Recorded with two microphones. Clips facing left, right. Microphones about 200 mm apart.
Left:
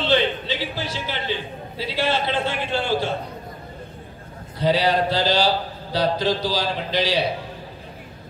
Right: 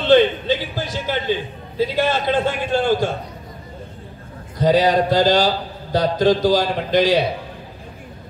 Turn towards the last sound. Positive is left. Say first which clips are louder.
# right 6 dB
turn(degrees=-50)  # may be behind; listen again after turning